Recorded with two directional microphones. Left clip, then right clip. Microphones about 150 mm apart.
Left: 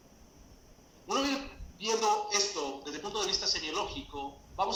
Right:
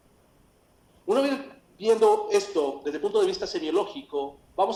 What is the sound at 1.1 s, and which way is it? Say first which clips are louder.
A man's voice: right 7 dB; 45° right (ahead or behind).